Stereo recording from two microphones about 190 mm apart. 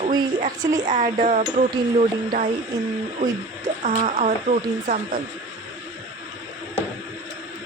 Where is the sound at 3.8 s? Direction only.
40° right (ahead or behind).